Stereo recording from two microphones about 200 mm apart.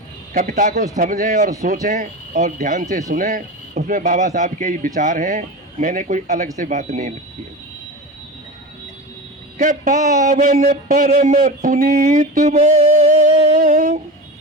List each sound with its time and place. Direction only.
0.3 s speech: 40° right (ahead or behind)
9.6 s speech: 40° right (ahead or behind)